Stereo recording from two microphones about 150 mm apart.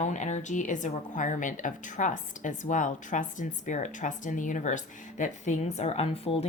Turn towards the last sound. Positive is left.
turn(degrees=40)  # may be behind; listen again after turning